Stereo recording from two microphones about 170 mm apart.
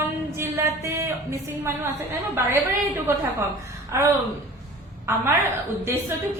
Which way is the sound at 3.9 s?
15° right (ahead or behind).